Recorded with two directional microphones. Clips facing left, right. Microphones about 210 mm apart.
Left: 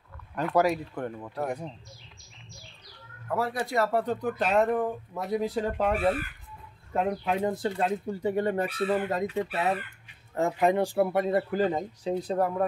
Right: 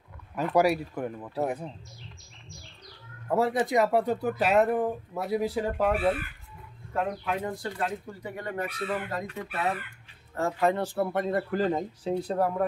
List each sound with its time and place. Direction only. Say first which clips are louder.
0.4 s speech: right 1 dB; 10° right (ahead or behind)
3.3 s speech: right 4 dB; 25° right (ahead or behind); by 5.9 s 5° right (ahead or behind)
6.9 s speech: left 2 dB; 20° left (ahead or behind); by 12.6 s centre (ahead or behind)